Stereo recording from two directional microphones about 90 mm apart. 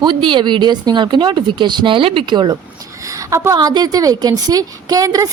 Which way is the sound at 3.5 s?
50° right (ahead or behind).